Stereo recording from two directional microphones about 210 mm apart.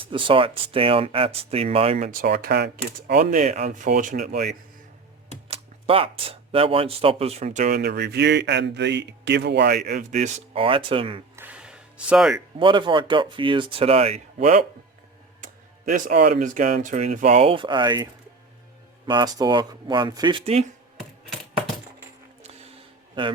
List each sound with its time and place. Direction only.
0.0 s speech: 25° right (ahead or behind)
2.0 s speech: 45° right (ahead or behind)
3.2 s speech: 35° right (ahead or behind)
7.7 s speech: 50° right (ahead or behind); by 11.2 s 25° right (ahead or behind)
11.3 s a sound: 5° right (ahead or behind)
12.5 s speech: 25° right (ahead or behind)
15.9 s speech: 40° right (ahead or behind)
22.4 s a sound: 30° right (ahead or behind)